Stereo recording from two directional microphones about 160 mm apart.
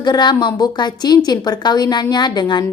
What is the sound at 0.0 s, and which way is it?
Speech, 25° left (ahead or behind).